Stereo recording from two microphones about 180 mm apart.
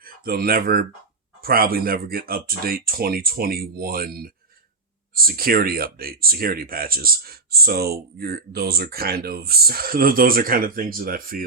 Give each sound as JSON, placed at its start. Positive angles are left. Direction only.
{"t": 0.0, "sound": "speech", "side_deg": -55}